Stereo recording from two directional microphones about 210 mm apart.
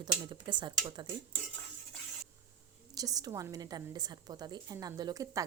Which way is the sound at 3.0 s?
15° right (ahead or behind).